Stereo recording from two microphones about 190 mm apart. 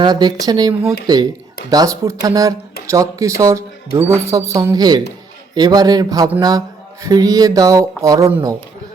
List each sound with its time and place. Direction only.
0.0 s speech: 20° right (ahead or behind)